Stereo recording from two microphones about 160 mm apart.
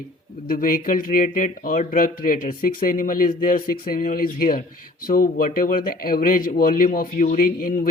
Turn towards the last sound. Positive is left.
turn(degrees=60)  # may be behind; listen again after turning